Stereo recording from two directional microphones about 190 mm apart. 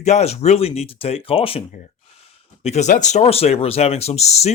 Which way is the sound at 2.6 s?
35° left (ahead or behind).